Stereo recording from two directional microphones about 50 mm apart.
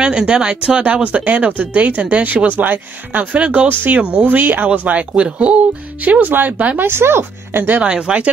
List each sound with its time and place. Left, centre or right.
0.0 s speech: centre; by 3.3 s right
3.3 s speech: right
6.8 s speech: right
7.8 s speech: right